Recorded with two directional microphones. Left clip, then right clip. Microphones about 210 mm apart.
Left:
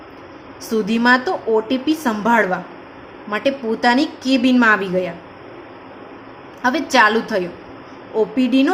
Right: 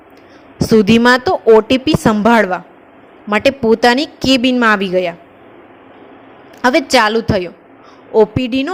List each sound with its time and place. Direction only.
0.6 s a woman's voice: 40° right (ahead or behind)
6.6 s a woman's voice: 35° right (ahead or behind)